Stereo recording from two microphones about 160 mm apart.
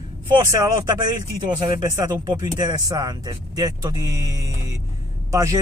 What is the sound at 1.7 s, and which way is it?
Speech, 25° right (ahead or behind).